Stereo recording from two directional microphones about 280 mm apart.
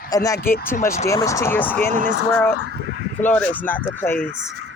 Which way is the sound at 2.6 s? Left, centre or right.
Right.